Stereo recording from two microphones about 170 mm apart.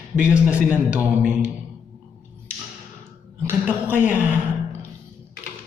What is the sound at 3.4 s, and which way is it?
Speech, 10° right (ahead or behind).